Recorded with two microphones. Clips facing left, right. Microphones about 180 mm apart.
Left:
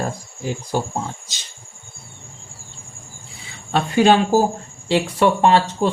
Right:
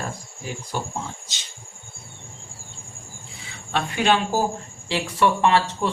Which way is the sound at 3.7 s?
35° left (ahead or behind).